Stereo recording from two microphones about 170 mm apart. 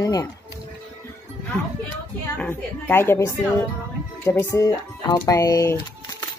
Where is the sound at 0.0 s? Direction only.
20° left (ahead or behind).